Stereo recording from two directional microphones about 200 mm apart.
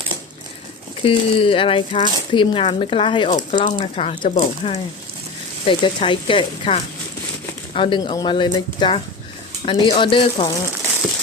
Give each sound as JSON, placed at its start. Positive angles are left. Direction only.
{"t": 1.0, "sound": "speech", "side_deg": 25}